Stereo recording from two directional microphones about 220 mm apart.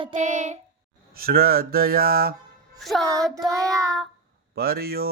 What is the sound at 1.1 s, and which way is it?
Mantra, 45° right (ahead or behind).